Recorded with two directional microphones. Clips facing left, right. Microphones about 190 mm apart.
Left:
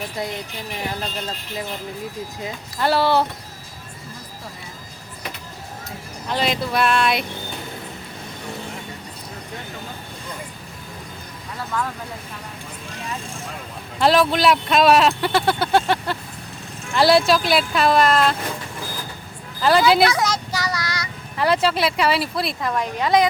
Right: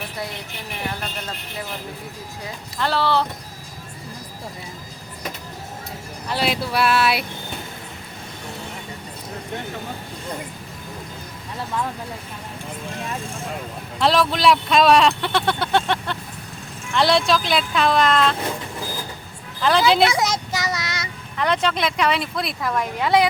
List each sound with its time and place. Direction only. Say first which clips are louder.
2.7 s speech: left 3 dB; 10° left (ahead or behind)
6.2 s speech: left 1 dB; 5° right (ahead or behind)
14.0 s speech: left 2 dB; centre (ahead or behind)
19.6 s speech: left 1 dB; 5° left (ahead or behind)
20.1 s speech: even; 20° right (ahead or behind)
21.3 s speech: left 2 dB; 5° left (ahead or behind)